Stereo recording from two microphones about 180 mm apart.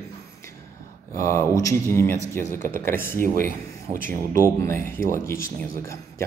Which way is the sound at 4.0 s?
15° left (ahead or behind).